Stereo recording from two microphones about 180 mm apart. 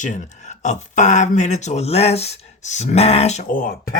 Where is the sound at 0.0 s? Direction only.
45° left (ahead or behind).